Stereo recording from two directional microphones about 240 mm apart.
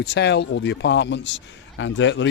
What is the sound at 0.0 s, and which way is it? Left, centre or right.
Speech, left.